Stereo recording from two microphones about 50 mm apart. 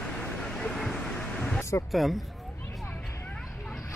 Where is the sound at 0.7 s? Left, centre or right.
Centre.